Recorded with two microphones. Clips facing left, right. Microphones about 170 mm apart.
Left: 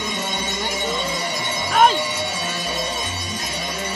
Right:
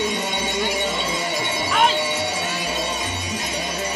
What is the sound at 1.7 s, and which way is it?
Music, 45° left (ahead or behind).